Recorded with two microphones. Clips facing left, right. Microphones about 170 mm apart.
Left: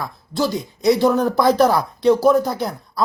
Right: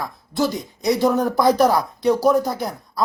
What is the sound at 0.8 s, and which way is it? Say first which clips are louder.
Speech: left 2 dB; 15° right (ahead or behind).